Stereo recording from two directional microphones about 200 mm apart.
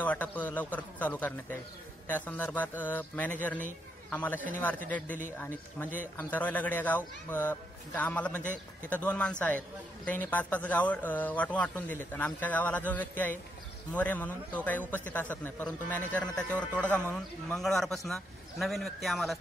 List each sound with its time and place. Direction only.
0.0 s a man's voice: 10° left (ahead or behind)